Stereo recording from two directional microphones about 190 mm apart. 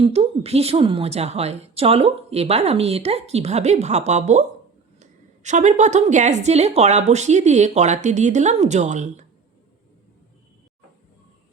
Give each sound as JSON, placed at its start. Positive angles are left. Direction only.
{"t": 0.0, "sound": "a woman's voice", "side_deg": -35}